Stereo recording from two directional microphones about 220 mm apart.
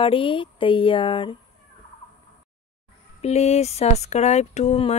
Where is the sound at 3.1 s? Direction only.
30° left (ahead or behind).